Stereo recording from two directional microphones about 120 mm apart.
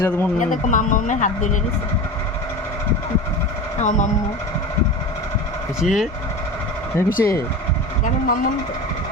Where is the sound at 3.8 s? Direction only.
90° left.